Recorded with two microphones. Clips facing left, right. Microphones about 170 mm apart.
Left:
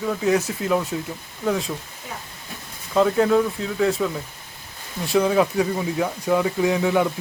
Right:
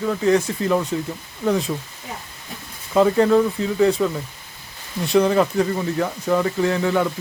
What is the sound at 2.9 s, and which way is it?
Speech, centre (ahead or behind).